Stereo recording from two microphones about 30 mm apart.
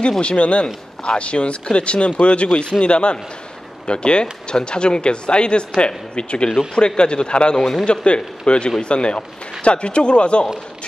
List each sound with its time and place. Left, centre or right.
0.2 s speech: left